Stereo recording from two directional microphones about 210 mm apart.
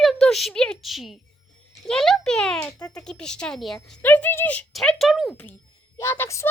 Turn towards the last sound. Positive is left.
turn(degrees=10)  # may be behind; listen again after turning